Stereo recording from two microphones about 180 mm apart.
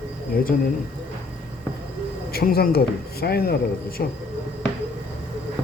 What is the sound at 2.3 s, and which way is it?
Speech, 60° left (ahead or behind).